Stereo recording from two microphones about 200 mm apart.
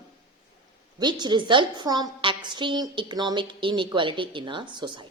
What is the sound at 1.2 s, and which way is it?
A woman's voice, 20° right (ahead or behind).